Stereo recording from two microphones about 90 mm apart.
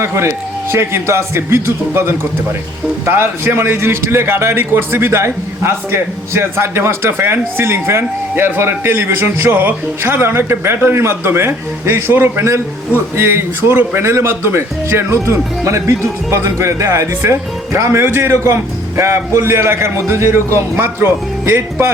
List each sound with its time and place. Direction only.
0.0 s a man's voice: 30° right (ahead or behind)